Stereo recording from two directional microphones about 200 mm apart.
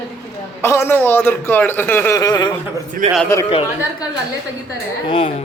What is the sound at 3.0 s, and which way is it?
Speech, 35° right (ahead or behind).